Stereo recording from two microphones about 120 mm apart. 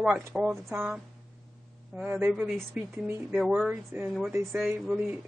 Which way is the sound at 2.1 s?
20° right (ahead or behind).